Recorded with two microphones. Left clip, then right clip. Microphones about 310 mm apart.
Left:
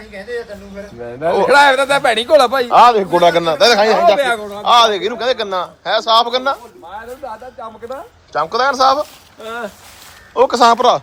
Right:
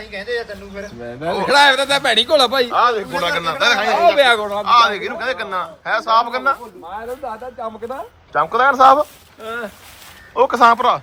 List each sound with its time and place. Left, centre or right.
0.0 s speech: centre
1.5 s a man's voice: left
4.2 s speech: centre
4.6 s a man's voice: centre
7.3 s speech: centre
8.3 s speech: centre
9.4 s speech: left
10.3 s a man's voice: centre